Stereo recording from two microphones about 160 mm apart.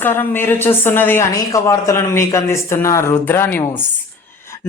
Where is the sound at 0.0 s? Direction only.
15° left (ahead or behind).